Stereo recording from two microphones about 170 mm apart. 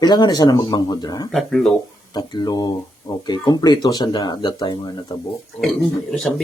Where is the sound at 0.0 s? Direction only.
25° left (ahead or behind).